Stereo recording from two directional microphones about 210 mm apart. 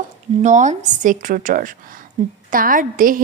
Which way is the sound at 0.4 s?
35° right (ahead or behind).